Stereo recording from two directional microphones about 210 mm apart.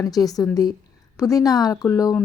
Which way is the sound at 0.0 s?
15° left (ahead or behind).